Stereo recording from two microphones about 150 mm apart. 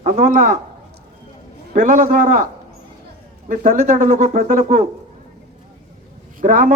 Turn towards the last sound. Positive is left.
turn(degrees=-60)  # may be behind; listen again after turning